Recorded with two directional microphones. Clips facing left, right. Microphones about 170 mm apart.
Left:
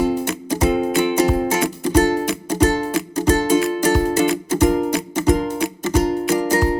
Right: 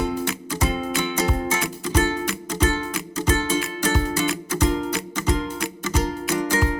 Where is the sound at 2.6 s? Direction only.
40° left (ahead or behind).